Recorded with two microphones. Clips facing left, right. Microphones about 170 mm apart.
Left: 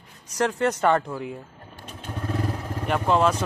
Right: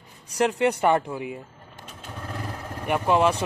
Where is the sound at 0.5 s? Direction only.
10° right (ahead or behind).